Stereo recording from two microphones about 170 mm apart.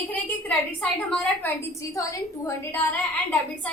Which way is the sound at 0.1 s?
10° left (ahead or behind).